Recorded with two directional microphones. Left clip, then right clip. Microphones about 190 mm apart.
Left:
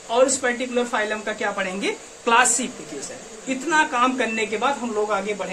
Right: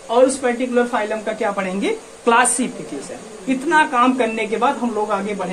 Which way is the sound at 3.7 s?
10° right (ahead or behind).